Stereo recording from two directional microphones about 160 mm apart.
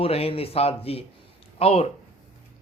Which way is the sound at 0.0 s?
35° left (ahead or behind).